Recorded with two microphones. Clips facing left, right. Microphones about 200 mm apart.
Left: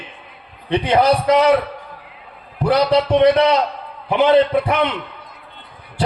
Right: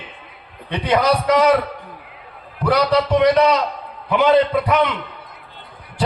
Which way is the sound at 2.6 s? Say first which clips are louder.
Left 2 dB; 30° left (ahead or behind).